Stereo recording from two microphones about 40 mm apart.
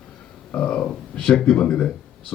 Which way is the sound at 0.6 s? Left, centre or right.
Left.